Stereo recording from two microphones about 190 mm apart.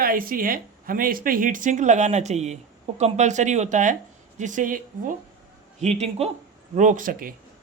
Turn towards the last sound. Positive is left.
turn(degrees=-45)  # may be behind; listen again after turning